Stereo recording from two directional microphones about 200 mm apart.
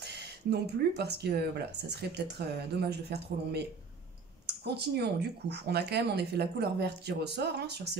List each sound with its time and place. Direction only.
0.0 s speech: 55° right (ahead or behind)